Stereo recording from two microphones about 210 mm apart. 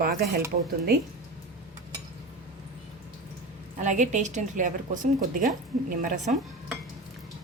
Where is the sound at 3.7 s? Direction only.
35° right (ahead or behind).